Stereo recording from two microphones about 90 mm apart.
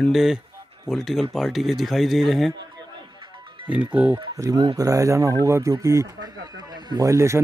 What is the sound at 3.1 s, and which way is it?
Music, 60° right (ahead or behind).